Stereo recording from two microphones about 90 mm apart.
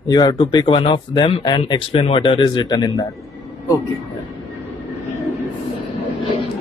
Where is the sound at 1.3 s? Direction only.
60° left (ahead or behind); by 3.1 s 45° left (ahead or behind).